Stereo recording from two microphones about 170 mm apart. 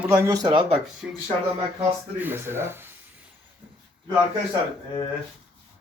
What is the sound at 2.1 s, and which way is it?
Speech, 10° right (ahead or behind).